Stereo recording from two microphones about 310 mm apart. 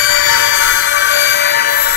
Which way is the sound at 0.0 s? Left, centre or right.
Left.